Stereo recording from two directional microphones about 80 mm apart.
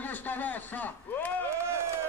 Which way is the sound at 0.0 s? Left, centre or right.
Left.